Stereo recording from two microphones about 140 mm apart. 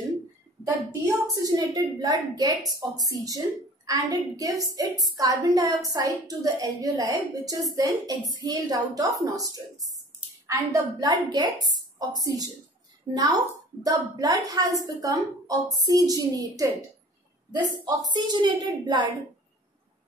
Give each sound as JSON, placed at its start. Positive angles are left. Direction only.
{"t": 0.7, "sound": "a woman's voice", "side_deg": -20}